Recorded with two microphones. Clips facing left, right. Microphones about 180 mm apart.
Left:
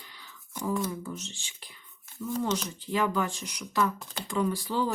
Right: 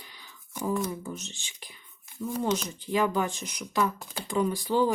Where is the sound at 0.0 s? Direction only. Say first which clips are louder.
Even; 15° right (ahead or behind).